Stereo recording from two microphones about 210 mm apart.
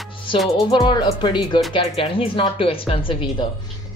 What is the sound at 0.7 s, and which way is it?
Speech, 20° left (ahead or behind).